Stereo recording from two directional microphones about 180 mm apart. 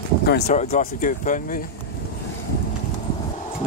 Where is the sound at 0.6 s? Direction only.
45° left (ahead or behind).